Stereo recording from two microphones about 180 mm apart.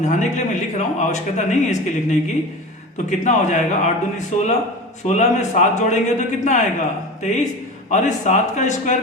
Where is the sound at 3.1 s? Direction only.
40° left (ahead or behind).